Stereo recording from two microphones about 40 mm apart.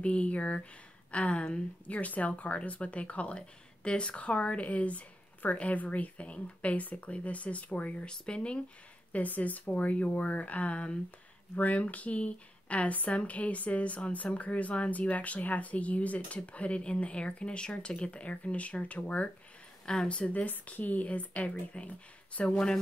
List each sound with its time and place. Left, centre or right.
0.0 s speech: left
1.9 s speech: left
8.1 s speech: left
9.1 s speech: left
20.4 s speech: left